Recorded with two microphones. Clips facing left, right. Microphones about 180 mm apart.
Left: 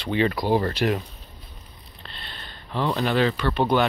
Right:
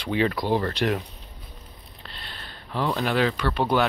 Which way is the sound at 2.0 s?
5° right (ahead or behind).